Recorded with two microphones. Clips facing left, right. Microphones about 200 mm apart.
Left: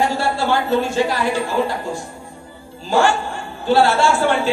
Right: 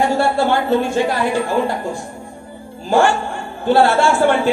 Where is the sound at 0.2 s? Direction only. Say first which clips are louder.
Right 3 dB; 55° right (ahead or behind).